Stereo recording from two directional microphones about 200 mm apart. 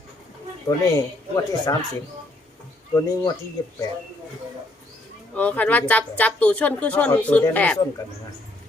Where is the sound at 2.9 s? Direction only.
15° left (ahead or behind).